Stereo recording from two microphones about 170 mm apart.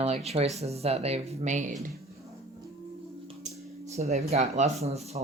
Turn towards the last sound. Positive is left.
turn(degrees=-40)  # may be behind; listen again after turning